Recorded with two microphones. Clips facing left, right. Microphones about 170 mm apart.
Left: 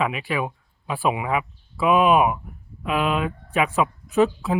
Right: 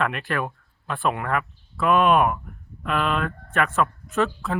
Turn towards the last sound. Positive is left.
turn(degrees=5)  # may be behind; listen again after turning